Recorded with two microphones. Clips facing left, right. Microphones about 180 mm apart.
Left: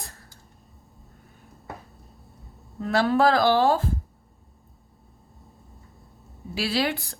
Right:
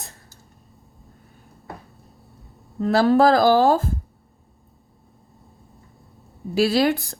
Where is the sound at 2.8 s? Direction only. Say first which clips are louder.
Right 5 dB; 35° right (ahead or behind).